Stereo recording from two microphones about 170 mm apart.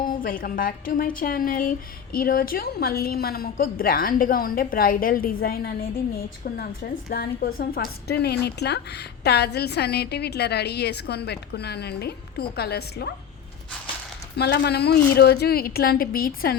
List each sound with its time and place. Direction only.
0.0 s a woman's voice: 55° left (ahead or behind)
14.3 s a woman's voice: 80° left; by 16.6 s 60° left (ahead or behind)